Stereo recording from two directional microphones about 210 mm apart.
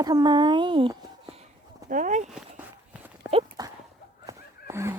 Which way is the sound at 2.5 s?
10° right (ahead or behind).